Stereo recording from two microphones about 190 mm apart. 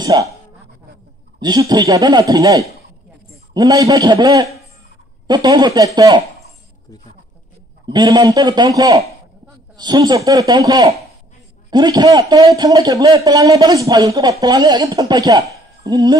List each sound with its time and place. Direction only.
0.0 s speech: 15° right (ahead or behind)
1.4 s speech: 20° right (ahead or behind)
7.8 s speech: 20° right (ahead or behind)